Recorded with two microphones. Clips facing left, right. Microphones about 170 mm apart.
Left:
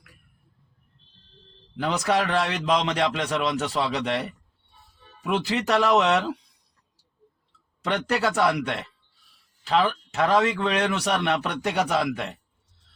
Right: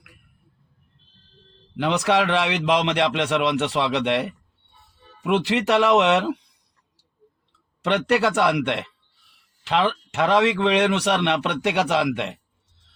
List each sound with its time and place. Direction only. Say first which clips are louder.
1.7 s a man's voice: right 3 dB; 65° right (ahead or behind)
7.8 s a man's voice: right 5 dB; 65° right (ahead or behind)